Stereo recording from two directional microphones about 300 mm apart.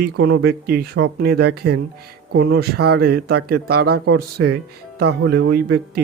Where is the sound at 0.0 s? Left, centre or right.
Right.